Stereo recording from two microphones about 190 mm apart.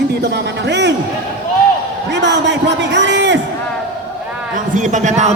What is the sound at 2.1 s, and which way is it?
A man's voice, 70° right (ahead or behind).